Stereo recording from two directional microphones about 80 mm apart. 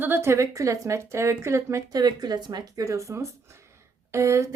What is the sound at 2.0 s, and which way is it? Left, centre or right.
A woman's voice, right.